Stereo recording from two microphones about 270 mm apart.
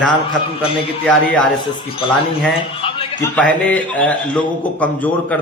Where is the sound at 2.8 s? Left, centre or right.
Centre.